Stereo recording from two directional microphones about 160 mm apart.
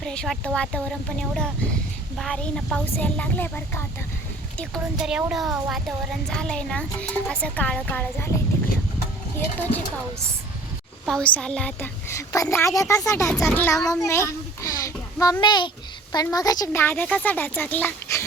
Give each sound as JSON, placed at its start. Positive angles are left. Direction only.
{"t": 0.0, "sound": "a child's voice", "side_deg": 5}
{"t": 4.9, "sound": "a child's voice", "side_deg": -5}
{"t": 11.0, "sound": "a woman's voice", "side_deg": 5}
{"t": 16.8, "sound": "a woman's voice", "side_deg": 10}